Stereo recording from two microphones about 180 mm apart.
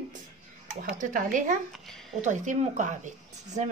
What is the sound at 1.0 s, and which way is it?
Speech, 45° right (ahead or behind).